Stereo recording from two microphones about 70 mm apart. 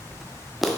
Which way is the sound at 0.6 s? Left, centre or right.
Centre.